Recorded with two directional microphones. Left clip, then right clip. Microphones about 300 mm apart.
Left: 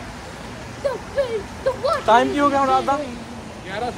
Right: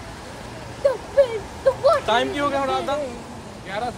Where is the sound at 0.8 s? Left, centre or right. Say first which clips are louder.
Right 4 dB; right.